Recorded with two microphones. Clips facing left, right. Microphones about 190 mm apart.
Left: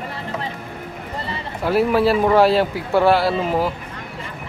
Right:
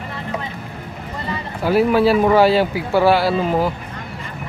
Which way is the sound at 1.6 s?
Centre (ahead or behind).